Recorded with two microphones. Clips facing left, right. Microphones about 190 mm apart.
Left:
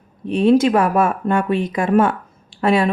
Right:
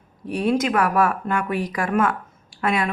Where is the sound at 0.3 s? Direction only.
25° left (ahead or behind).